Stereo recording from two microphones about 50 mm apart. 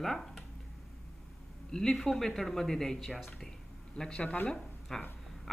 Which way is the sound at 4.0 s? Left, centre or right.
Centre.